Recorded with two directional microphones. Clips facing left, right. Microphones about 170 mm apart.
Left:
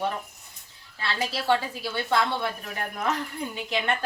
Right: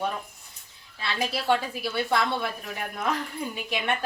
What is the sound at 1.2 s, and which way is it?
A woman's voice, 15° right (ahead or behind).